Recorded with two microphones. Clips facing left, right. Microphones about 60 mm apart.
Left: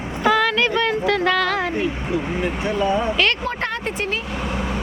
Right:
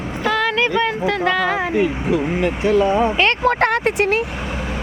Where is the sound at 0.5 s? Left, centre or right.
Centre.